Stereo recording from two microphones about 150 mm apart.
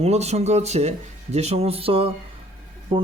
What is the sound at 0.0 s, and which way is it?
Speech, 45° right (ahead or behind).